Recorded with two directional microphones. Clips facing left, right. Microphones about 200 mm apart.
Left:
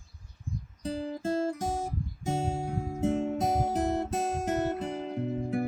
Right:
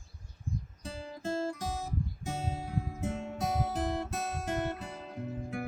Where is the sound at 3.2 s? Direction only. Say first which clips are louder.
Left 6 dB; 45° left (ahead or behind).